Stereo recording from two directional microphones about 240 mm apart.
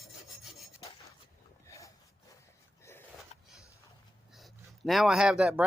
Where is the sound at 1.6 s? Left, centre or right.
Centre.